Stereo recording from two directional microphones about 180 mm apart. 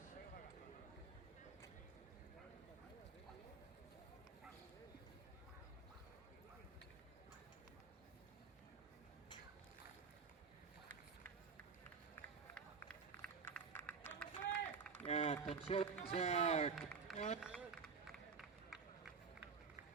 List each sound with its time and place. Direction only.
12.5 s run: 5° left (ahead or behind)
15.0 s run: 35° left (ahead or behind)
15.6 s speech: 35° left (ahead or behind)
16.7 s speech: centre (ahead or behind)
17.2 s speech: 40° left (ahead or behind)
17.4 s run: 5° right (ahead or behind)